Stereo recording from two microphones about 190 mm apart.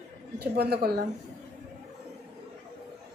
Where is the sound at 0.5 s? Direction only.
55° right (ahead or behind).